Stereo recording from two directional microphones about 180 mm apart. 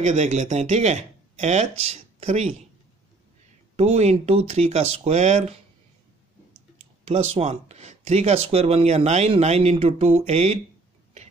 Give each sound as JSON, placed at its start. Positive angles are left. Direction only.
{"t": 0.0, "sound": "speech", "side_deg": -40}
{"t": 3.7, "sound": "speech", "side_deg": -35}
{"t": 7.1, "sound": "speech", "side_deg": -35}